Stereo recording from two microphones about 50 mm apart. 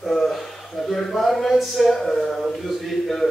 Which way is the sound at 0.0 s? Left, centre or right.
Centre.